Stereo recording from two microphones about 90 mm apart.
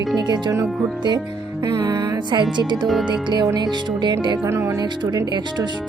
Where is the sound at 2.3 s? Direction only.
55° right (ahead or behind).